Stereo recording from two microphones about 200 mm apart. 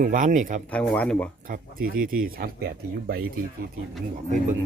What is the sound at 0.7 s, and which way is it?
Speech, 5° left (ahead or behind).